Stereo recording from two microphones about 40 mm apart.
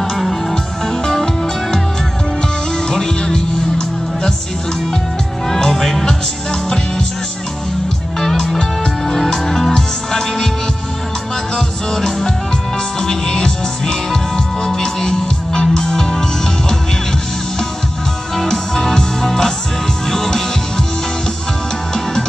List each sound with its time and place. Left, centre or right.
0.2 s music: centre
1.0 s music: centre
2.9 s music: centre
5.5 s music: centre
8.2 s music: centre
11.5 s music: centre
18.3 s music: centre